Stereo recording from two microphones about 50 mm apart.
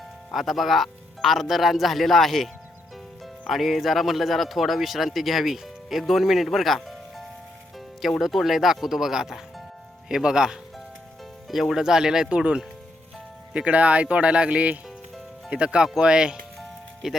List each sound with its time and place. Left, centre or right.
0.3 s speech: centre
3.5 s speech: centre
11.4 s speech: centre
16.6 s music: centre